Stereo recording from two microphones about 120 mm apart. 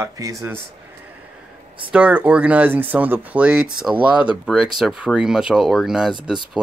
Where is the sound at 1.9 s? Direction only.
10° right (ahead or behind).